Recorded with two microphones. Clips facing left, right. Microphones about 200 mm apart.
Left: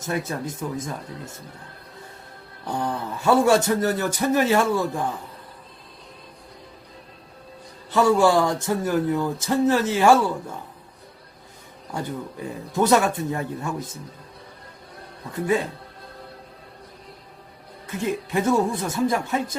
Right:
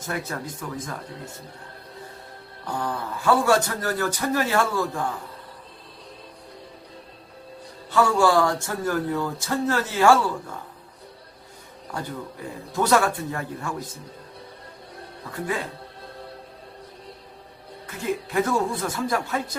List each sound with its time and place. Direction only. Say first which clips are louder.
0.0 s a man's voice: left 3 dB; 25° left (ahead or behind)
2.6 s a man's voice: left 2 dB; 20° left (ahead or behind)
7.9 s a man's voice: left 2 dB; 20° left (ahead or behind)
12.7 s a man's voice: left 2 dB; 20° left (ahead or behind)
15.3 s a man's voice: left 6 dB; 25° left (ahead or behind)
18.3 s a man's voice: left 3 dB; 20° left (ahead or behind)